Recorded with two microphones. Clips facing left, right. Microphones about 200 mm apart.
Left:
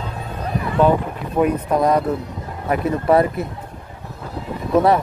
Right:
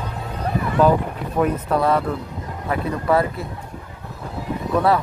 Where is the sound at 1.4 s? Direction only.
15° left (ahead or behind).